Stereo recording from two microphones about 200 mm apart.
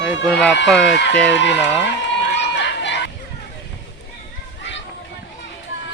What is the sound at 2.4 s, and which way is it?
Run, 60° left (ahead or behind).